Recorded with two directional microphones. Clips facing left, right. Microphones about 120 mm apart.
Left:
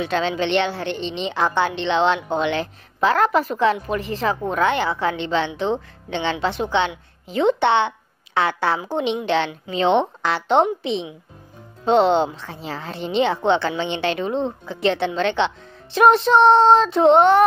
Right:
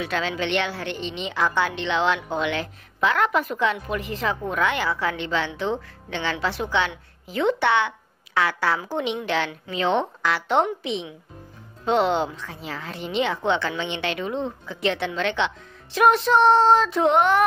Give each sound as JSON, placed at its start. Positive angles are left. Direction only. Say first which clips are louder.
{"t": 0.0, "sound": "a woman's voice", "louder": "left 4 dB", "side_deg": 25}